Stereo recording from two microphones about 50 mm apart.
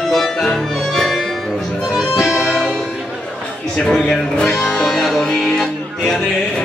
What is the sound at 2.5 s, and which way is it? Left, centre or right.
Music, centre.